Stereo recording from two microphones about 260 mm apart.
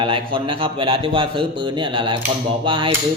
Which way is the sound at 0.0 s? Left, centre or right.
Centre.